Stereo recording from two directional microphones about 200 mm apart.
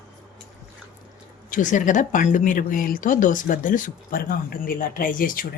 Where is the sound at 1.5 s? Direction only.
40° left (ahead or behind).